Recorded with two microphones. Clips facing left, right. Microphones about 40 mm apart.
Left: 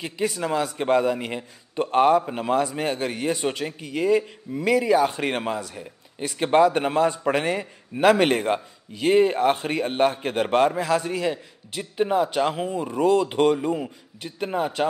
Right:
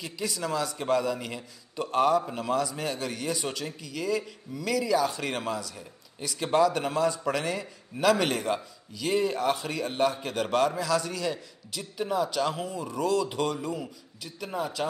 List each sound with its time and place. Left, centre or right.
0.0 s a man's voice: left